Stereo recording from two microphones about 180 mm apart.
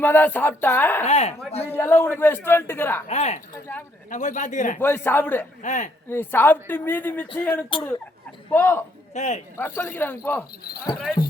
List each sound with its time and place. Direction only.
0.0 s speech: 10° left (ahead or behind)
1.0 s speech: 35° left (ahead or behind)
1.7 s speech: 15° left (ahead or behind)
3.1 s speech: 40° left (ahead or behind)
4.8 s speech: 10° left (ahead or behind)
5.6 s speech: 45° left (ahead or behind)
6.1 s speech: 10° left (ahead or behind)
9.1 s speech: 40° left (ahead or behind)
9.6 s speech: 10° left (ahead or behind)